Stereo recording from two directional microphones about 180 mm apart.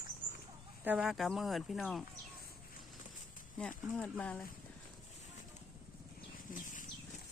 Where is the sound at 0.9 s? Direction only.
5° right (ahead or behind).